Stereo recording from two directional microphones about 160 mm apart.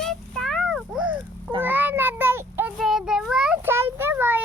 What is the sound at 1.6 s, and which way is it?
Child singing, 10° right (ahead or behind).